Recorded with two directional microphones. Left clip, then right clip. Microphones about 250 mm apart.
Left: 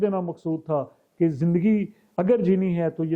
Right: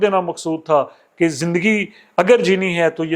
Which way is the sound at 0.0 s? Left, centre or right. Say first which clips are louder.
Right 9 dB; centre.